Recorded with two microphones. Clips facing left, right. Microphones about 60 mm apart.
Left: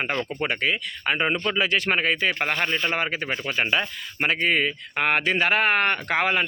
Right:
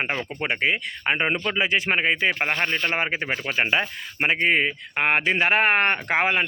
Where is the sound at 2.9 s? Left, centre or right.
Right.